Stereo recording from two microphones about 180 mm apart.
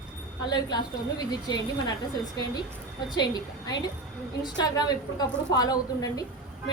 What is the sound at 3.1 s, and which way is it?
A woman's voice, 25° left (ahead or behind).